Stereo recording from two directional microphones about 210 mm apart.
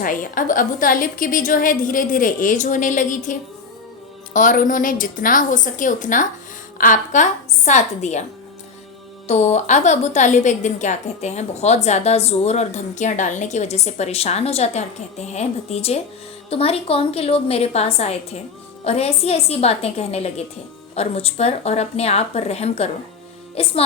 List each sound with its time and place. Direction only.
0.0 s a woman's voice: 40° left (ahead or behind)
4.4 s a woman's voice: 40° left (ahead or behind)
9.2 s a woman's voice: 30° left (ahead or behind)